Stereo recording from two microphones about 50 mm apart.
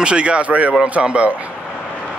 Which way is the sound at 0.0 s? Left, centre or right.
Right.